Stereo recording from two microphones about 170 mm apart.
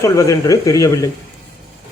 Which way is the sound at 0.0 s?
20° left (ahead or behind).